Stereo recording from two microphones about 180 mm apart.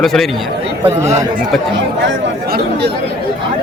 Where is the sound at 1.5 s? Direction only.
Centre (ahead or behind).